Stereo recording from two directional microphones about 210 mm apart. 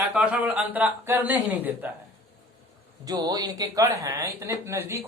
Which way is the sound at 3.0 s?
20° right (ahead or behind).